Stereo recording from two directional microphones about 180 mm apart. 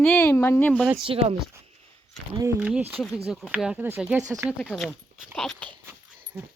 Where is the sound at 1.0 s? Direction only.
30° right (ahead or behind).